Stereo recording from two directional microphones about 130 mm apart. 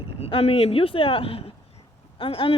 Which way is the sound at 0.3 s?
50° left (ahead or behind).